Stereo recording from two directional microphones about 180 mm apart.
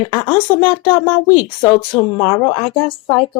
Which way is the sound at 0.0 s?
25° left (ahead or behind).